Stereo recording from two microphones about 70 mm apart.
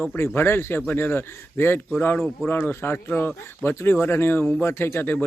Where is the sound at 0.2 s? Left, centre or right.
Left.